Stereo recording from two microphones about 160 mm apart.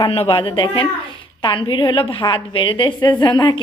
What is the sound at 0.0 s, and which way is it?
A woman's voice, 35° left (ahead or behind).